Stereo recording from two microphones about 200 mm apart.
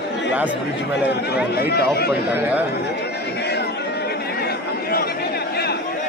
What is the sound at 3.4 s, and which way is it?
Music, 55° left (ahead or behind).